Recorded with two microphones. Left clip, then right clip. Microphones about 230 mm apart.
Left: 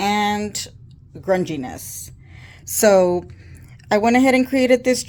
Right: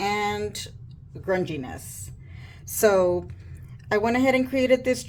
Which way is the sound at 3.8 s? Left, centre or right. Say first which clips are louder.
Left 6 dB; left.